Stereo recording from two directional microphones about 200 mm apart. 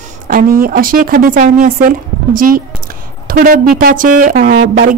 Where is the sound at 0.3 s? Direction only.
45° right (ahead or behind).